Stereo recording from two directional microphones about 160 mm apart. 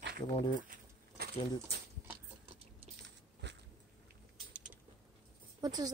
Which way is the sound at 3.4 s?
90° right.